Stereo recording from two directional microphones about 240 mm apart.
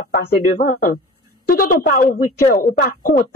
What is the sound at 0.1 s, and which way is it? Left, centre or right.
A woman's voice, left.